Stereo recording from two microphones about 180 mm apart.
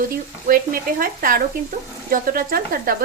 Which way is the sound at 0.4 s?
50° right (ahead or behind).